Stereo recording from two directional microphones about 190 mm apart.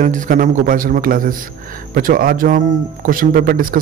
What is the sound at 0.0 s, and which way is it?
Speech, 45° right (ahead or behind).